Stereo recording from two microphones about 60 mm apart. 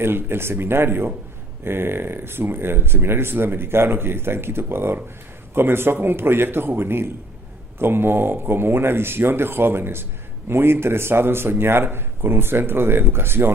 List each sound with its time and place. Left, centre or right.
0.0 s speech: right